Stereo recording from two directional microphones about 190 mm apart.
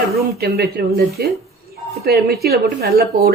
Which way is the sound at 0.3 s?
55° right (ahead or behind).